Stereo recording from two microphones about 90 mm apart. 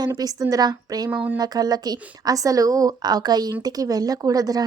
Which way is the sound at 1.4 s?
45° right (ahead or behind).